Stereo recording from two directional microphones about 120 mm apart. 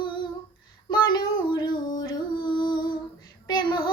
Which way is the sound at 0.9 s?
40° left (ahead or behind).